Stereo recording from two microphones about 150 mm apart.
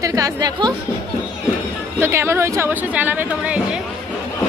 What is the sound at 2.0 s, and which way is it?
A woman's voice, 15° right (ahead or behind).